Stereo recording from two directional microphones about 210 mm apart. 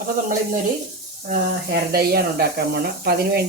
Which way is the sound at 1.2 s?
45° right (ahead or behind).